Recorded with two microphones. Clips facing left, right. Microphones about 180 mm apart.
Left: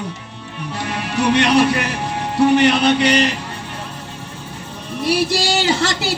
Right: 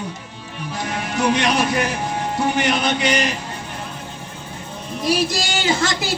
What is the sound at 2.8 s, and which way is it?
Speech, 65° left (ahead or behind).